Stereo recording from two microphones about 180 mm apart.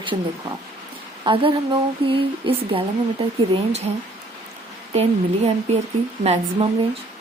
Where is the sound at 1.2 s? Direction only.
30° right (ahead or behind).